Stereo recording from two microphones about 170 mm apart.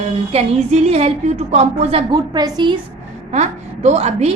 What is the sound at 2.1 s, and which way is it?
Speech, 25° right (ahead or behind).